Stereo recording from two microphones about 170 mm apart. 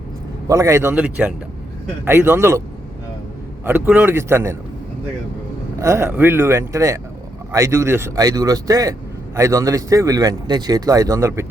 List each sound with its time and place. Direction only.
0.4 s speech: 20° right (ahead or behind)
3.6 s speech: 10° right (ahead or behind)
5.8 s speech: 15° right (ahead or behind)